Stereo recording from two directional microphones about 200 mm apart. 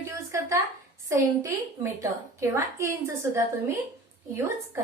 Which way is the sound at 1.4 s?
15° right (ahead or behind).